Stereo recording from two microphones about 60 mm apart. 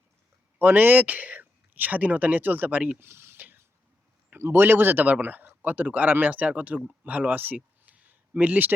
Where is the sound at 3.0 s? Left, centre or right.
Right.